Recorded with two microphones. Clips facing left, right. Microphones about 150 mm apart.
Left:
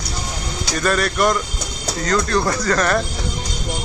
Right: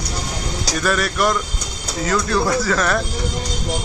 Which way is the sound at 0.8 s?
Centre (ahead or behind).